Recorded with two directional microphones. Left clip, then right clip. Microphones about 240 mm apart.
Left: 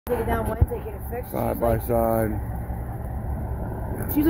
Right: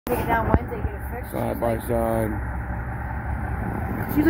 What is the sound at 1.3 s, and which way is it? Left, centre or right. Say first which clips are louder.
Speech: left 1 dB; centre.